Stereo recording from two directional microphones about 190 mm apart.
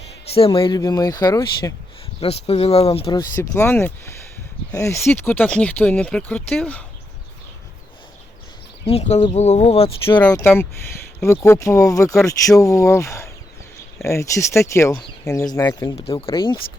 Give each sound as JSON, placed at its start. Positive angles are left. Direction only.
{"t": 0.3, "sound": "speech", "side_deg": 30}
{"t": 2.2, "sound": "speech", "side_deg": 30}
{"t": 3.5, "sound": "speech", "side_deg": 10}
{"t": 8.9, "sound": "speech", "side_deg": 35}
{"t": 10.2, "sound": "speech", "side_deg": 5}